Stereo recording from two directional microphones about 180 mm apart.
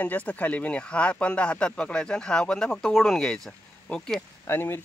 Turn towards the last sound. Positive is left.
turn(degrees=10)  # may be behind; listen again after turning